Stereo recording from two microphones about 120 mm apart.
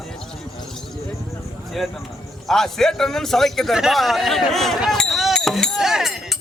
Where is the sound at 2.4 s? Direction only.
5° left (ahead or behind).